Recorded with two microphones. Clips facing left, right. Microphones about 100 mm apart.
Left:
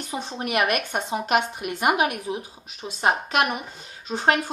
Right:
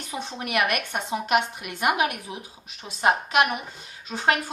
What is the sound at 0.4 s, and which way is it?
A woman's voice, 30° left (ahead or behind).